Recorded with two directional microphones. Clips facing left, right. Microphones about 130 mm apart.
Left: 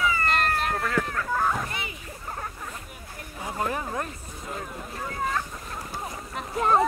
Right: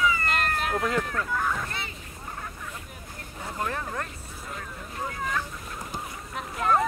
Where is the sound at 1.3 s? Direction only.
45° left (ahead or behind).